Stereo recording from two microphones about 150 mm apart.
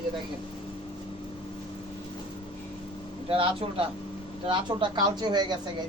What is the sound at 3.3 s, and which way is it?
Speech, 35° right (ahead or behind).